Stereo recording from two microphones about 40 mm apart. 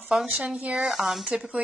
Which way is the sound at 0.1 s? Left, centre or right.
Right.